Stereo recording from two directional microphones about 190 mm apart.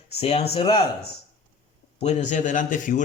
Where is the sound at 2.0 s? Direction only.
35° left (ahead or behind).